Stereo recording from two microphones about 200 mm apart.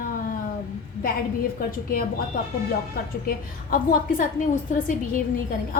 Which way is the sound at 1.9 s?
45° left (ahead or behind).